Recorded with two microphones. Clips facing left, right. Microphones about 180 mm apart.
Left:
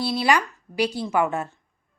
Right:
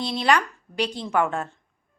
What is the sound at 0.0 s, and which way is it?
A woman's voice, 10° left (ahead or behind).